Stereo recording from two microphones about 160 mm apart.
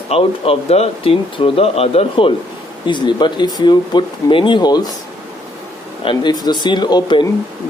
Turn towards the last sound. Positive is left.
turn(degrees=25)  # may be behind; listen again after turning